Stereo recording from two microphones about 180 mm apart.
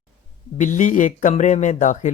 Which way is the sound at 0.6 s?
45° left (ahead or behind).